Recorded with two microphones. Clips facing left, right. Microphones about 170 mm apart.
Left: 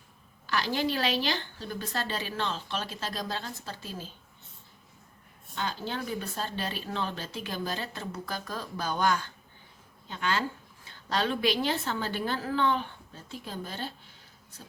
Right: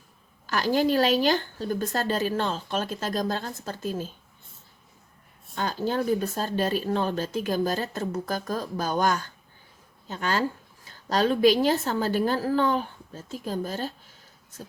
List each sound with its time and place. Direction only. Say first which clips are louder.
0.4 s speech: right 6 dB; 45° right (ahead or behind)
5.5 s a woman's voice: right 7 dB; 45° right (ahead or behind)